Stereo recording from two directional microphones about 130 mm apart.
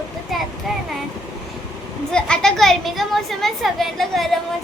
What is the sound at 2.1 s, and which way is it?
A woman's voice, 5° left (ahead or behind).